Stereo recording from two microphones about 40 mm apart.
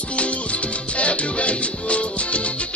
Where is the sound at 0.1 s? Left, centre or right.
Left.